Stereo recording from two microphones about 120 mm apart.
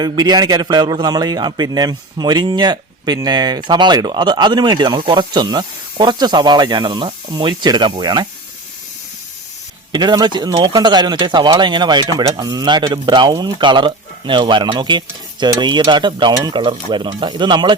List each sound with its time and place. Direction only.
0.0 s a man's voice: 35° right (ahead or behind)
9.9 s a man's voice: 35° right (ahead or behind)